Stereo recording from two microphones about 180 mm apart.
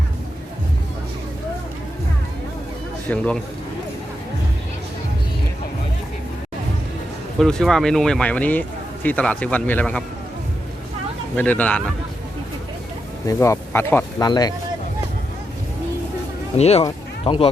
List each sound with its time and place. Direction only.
3.1 s a man's voice: 5° left (ahead or behind)
7.3 s a man's voice: 5° left (ahead or behind)
11.3 s a man's voice: 10° left (ahead or behind)
13.2 s speech: 15° left (ahead or behind)
16.6 s speech: 35° left (ahead or behind)